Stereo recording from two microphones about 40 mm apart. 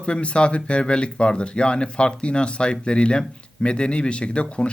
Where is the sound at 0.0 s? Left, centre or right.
Left.